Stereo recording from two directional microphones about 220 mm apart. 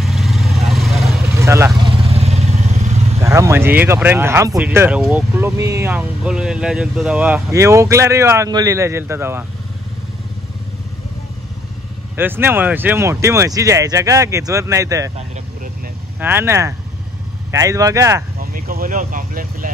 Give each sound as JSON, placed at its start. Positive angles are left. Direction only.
{"t": 0.0, "sound": "vehicle", "side_deg": 0}
{"t": 1.3, "sound": "vehicle", "side_deg": -15}
{"t": 2.0, "sound": "vehicle", "side_deg": -30}
{"t": 3.2, "sound": "speech", "side_deg": -15}
{"t": 12.2, "sound": "speech", "side_deg": -10}
{"t": 16.2, "sound": "speech", "side_deg": -10}
{"t": 18.4, "sound": "speech", "side_deg": -40}